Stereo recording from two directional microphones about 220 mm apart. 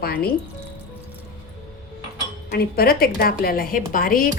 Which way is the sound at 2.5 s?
45° left (ahead or behind).